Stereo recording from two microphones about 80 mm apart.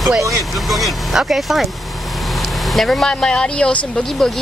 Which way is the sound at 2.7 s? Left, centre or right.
Centre.